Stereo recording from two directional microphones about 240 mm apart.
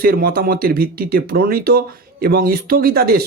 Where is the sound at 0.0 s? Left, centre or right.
Right.